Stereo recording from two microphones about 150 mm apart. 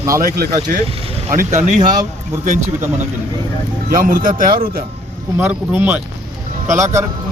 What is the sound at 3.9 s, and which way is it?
Speech, 65° right (ahead or behind).